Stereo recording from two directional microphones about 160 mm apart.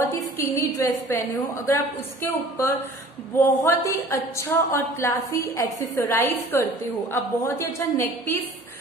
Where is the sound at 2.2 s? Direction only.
15° left (ahead or behind).